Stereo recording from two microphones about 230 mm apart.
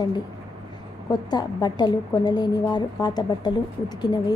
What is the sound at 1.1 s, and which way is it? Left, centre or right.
A woman's voice, centre.